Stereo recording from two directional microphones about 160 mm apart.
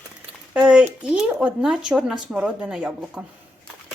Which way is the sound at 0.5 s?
5° right (ahead or behind).